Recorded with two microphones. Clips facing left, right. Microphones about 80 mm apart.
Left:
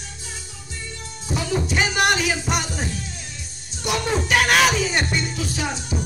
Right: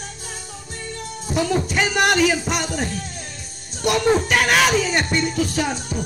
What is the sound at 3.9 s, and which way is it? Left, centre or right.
Music, centre.